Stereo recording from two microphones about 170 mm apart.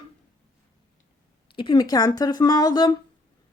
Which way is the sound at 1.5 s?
30° left (ahead or behind).